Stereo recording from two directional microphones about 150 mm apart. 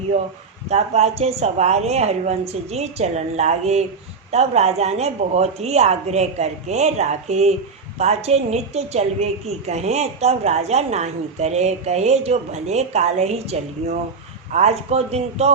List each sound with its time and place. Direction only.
0.7 s a woman's voice: 45° right (ahead or behind)